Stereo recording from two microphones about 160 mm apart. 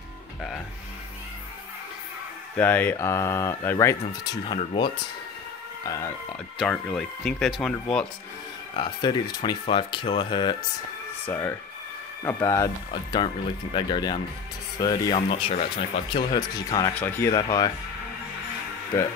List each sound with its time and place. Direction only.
2.5 s speech: 10° left (ahead or behind); by 4.9 s 30° left (ahead or behind)
5.9 s speech: 15° left (ahead or behind)
6.6 s speech: 5° left (ahead or behind)
8.7 s speech: 30° left (ahead or behind)
11.2 s speech: 15° left (ahead or behind)
17.4 s speech: 25° left (ahead or behind)